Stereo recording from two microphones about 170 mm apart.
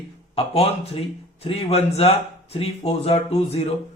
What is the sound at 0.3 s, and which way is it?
A man's voice, 35° left (ahead or behind).